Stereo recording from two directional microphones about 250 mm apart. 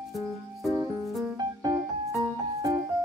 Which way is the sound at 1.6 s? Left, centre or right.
Centre.